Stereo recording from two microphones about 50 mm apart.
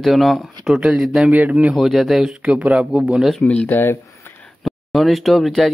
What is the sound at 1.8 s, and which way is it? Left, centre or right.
Speech, centre.